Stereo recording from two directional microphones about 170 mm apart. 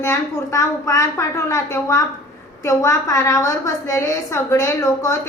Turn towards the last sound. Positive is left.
turn(degrees=15)  # may be behind; listen again after turning